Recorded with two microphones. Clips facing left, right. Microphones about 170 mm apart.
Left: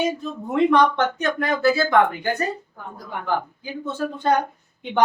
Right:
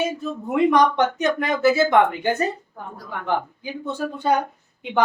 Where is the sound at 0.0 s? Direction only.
5° right (ahead or behind).